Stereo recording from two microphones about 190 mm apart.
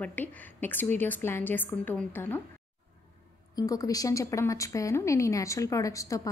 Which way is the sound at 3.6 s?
20° left (ahead or behind).